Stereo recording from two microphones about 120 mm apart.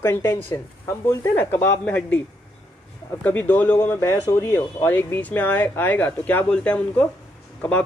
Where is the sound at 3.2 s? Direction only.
15° left (ahead or behind).